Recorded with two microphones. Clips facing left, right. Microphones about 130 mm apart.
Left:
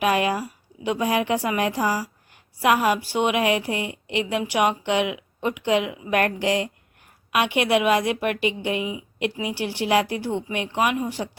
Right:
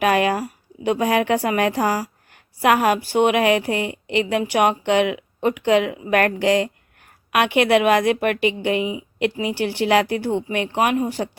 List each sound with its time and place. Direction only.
0.0 s a woman's voice: 60° right (ahead or behind)